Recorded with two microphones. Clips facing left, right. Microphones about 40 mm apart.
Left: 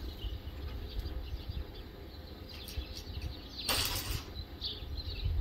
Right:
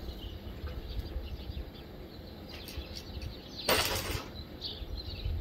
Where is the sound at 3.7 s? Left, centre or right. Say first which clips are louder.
Right 6 dB; right.